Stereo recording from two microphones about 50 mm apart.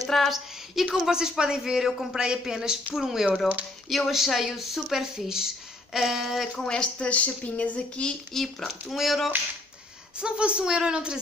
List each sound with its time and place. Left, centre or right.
0.1 s a woman's voice: centre
6.6 s speech: centre
8.4 s a woman's voice: centre
10.2 s a woman's voice: right